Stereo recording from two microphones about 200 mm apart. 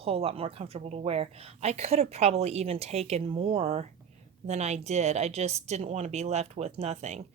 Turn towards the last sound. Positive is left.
turn(degrees=-35)  # may be behind; listen again after turning